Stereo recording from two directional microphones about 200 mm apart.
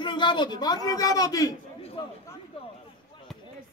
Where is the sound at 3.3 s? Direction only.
Centre (ahead or behind).